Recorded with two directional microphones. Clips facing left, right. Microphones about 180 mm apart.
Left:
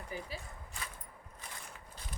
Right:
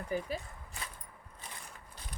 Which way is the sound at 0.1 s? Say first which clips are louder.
Right 8 dB; 50° right (ahead or behind).